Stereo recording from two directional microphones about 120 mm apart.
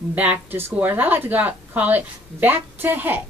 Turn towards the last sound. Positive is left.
turn(degrees=-15)  # may be behind; listen again after turning